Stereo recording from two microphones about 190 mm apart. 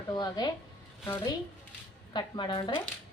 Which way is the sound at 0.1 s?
20° left (ahead or behind).